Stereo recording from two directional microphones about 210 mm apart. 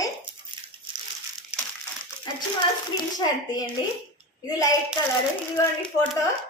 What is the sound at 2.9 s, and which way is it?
A woman's voice, 20° left (ahead or behind).